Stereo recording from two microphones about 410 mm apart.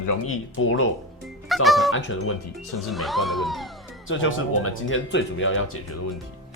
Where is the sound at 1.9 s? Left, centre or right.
Left.